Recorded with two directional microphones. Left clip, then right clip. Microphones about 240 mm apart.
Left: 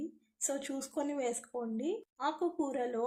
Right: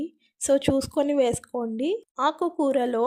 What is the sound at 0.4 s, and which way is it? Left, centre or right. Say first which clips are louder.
Speech: right 16 dB; right.